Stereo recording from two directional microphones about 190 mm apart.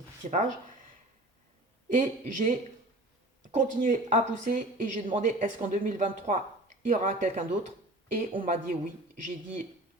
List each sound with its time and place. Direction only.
0.2 s a woman's voice: 40° right (ahead or behind)
1.9 s a woman's voice: 40° right (ahead or behind)
4.9 s speech: 25° right (ahead or behind)
5.2 s speech: 45° right (ahead or behind)